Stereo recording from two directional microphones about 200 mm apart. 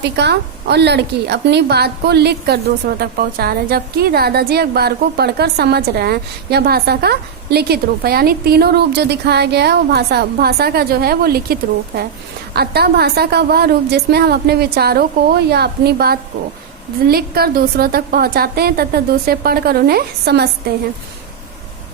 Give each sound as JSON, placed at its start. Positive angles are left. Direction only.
{"t": 0.0, "sound": "a woman's voice", "side_deg": -55}
{"t": 12.5, "sound": "a woman's voice", "side_deg": -50}